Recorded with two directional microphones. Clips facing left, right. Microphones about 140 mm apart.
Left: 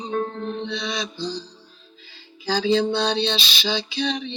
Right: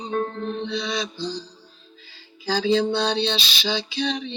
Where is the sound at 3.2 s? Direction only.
35° right (ahead or behind).